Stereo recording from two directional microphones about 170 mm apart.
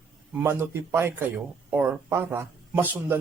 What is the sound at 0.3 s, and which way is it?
A man's voice, 10° right (ahead or behind).